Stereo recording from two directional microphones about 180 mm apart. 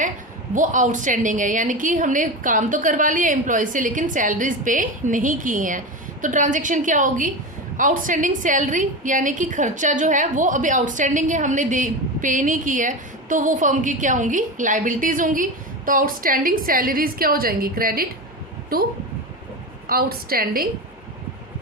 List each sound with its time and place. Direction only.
0.5 s a woman's voice: 45° right (ahead or behind)
19.9 s a woman's voice: 55° right (ahead or behind)